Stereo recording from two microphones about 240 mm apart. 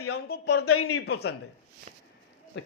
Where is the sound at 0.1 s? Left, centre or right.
Left.